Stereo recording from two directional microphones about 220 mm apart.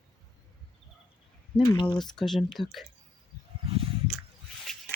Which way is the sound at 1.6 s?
20° left (ahead or behind).